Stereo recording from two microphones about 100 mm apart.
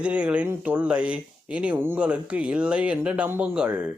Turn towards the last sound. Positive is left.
turn(degrees=-15)  # may be behind; listen again after turning